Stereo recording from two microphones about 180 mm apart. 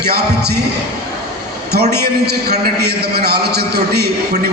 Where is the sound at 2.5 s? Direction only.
60° right (ahead or behind).